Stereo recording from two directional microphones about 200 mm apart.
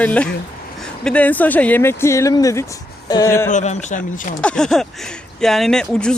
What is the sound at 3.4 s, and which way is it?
Speech, 35° left (ahead or behind).